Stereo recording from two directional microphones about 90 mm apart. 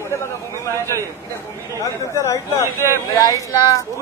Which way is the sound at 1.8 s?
35° left (ahead or behind).